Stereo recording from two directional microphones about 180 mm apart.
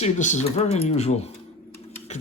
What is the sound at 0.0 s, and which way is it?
Speech, 40° left (ahead or behind).